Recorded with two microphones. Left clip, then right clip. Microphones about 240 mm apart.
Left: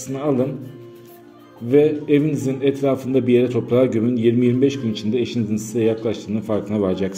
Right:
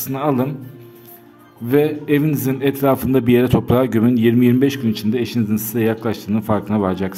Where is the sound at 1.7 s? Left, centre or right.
Right.